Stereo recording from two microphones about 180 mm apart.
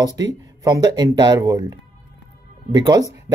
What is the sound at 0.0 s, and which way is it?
Speech, 20° right (ahead or behind).